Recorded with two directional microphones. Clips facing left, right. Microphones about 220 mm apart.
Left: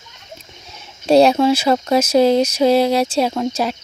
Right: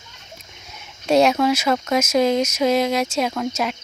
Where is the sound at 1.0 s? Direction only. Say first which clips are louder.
Left 4 dB; 30° left (ahead or behind).